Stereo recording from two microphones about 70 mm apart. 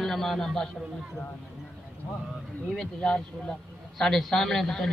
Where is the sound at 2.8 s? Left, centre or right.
Centre.